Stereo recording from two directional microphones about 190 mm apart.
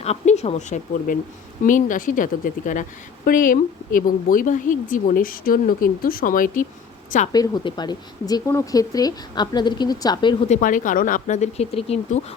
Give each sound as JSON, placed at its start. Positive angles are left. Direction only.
{"t": 0.0, "sound": "a woman's voice", "side_deg": 35}
{"t": 7.3, "sound": "speech", "side_deg": 20}
{"t": 10.5, "sound": "speech", "side_deg": 45}